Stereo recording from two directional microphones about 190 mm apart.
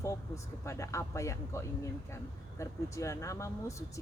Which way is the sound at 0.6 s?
15° left (ahead or behind).